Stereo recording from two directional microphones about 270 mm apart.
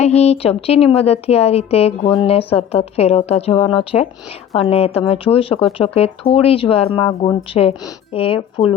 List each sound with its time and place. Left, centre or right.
0.0 s a woman's voice: left